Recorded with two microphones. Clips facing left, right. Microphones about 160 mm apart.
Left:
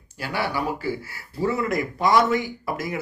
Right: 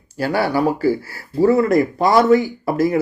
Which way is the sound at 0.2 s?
40° right (ahead or behind).